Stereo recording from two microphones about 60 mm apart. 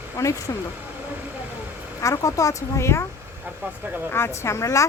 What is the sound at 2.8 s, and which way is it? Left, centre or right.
Speech, left.